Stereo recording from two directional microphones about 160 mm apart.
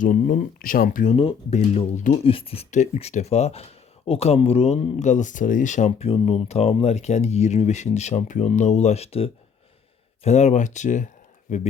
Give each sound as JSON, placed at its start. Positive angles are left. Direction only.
{"t": 0.0, "sound": "speech", "side_deg": 55}
{"t": 1.1, "sound": "speech", "side_deg": 40}